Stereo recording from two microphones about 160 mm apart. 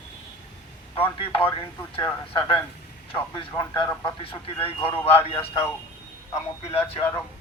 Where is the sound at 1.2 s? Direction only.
35° left (ahead or behind).